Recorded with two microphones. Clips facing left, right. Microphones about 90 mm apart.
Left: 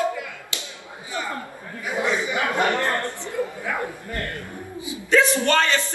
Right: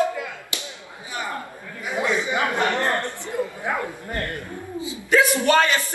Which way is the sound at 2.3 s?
20° right (ahead or behind).